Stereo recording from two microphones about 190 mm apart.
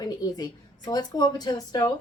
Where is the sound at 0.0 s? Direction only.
20° left (ahead or behind).